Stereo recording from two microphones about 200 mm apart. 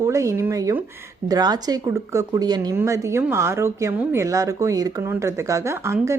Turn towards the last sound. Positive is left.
turn(degrees=-15)  # may be behind; listen again after turning